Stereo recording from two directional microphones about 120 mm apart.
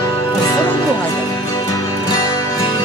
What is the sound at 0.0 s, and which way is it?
Music, 30° left (ahead or behind).